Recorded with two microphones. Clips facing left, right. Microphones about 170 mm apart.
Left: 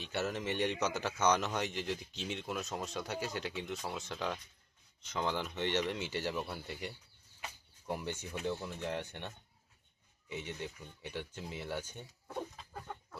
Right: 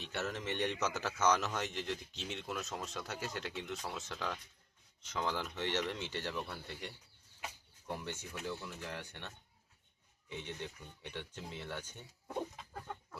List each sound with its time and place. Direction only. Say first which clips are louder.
0.0 s speech: left 3 dB; centre (ahead or behind)
8.4 s speech: left 6 dB; 25° left (ahead or behind)
10.2 s speech: left 2 dB; 10° left (ahead or behind)